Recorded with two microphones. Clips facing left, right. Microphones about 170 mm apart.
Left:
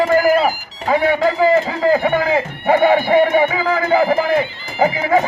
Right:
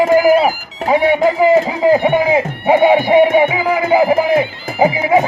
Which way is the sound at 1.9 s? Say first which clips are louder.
Right 3 dB; 20° right (ahead or behind).